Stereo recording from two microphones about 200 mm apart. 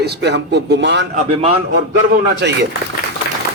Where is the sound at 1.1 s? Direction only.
30° right (ahead or behind).